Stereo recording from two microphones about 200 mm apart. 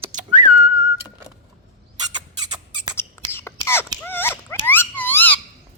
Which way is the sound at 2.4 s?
20° right (ahead or behind).